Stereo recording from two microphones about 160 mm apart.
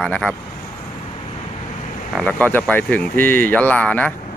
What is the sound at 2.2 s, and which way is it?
Speech, 10° left (ahead or behind).